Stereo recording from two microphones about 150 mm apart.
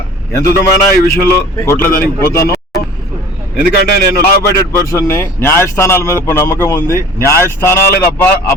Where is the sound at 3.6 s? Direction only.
90° left.